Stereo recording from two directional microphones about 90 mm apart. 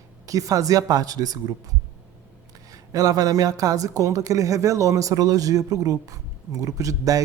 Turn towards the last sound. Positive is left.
turn(degrees=-40)  # may be behind; listen again after turning